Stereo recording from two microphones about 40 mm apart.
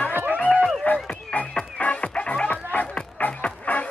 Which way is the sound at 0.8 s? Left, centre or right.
Left.